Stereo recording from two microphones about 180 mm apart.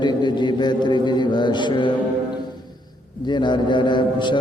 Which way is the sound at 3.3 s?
25° left (ahead or behind).